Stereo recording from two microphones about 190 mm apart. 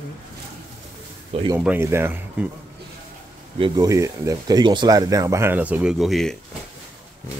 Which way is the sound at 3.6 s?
20° right (ahead or behind).